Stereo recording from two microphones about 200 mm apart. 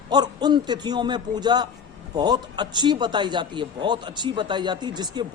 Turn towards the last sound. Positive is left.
turn(degrees=-20)  # may be behind; listen again after turning